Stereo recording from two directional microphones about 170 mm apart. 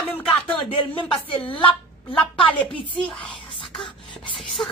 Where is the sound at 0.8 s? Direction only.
30° left (ahead or behind).